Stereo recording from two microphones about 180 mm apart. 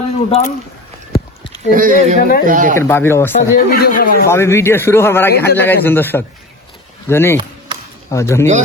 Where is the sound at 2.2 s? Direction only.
55° left (ahead or behind).